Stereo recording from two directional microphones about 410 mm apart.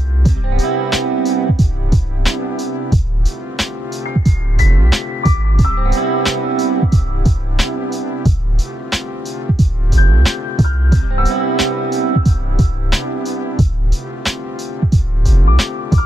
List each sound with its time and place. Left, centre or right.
0.2 s music: centre